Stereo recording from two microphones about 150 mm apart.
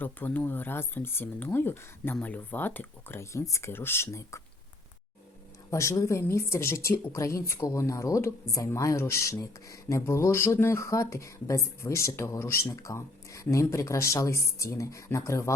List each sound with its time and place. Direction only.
0.0 s speech: 10° left (ahead or behind)
5.7 s speech: 20° left (ahead or behind)